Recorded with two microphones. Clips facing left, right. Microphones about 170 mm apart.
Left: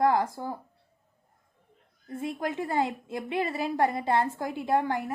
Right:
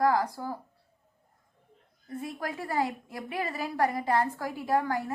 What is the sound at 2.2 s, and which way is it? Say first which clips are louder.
A woman's voice: left 5 dB; 20° left (ahead or behind).